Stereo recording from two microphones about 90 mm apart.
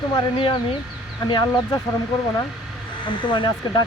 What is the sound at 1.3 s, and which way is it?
Speech, 55° left (ahead or behind).